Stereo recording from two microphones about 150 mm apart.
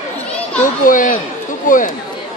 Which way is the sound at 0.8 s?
65° left (ahead or behind).